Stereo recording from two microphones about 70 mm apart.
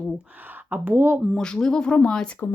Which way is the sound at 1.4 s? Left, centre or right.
Centre.